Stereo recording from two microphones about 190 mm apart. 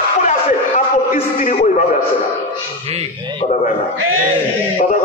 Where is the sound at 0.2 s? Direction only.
40° left (ahead or behind).